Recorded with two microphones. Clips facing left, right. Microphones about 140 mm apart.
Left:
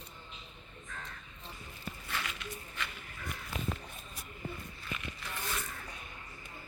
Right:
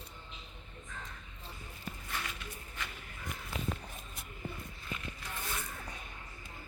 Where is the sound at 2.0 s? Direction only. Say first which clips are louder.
Left 3 dB; 90° left.